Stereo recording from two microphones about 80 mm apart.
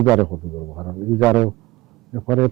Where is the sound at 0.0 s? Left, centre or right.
Centre.